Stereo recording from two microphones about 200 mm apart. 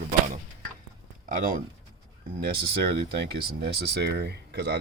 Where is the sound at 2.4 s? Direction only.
50° right (ahead or behind).